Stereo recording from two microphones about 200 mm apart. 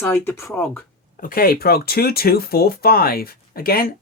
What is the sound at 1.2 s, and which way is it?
Speech, 45° left (ahead or behind).